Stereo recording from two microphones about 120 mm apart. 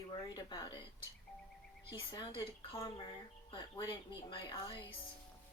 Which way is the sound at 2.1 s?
45° left (ahead or behind).